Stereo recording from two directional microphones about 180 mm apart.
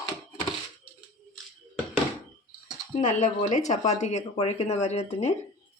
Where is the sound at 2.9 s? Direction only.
40° left (ahead or behind).